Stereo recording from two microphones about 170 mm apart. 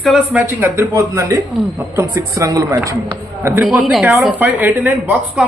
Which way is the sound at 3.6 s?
Centre (ahead or behind).